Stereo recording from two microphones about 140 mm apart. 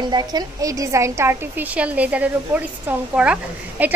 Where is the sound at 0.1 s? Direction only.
30° right (ahead or behind).